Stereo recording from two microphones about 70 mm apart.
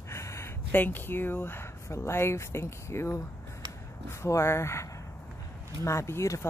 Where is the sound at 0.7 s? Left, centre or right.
Left.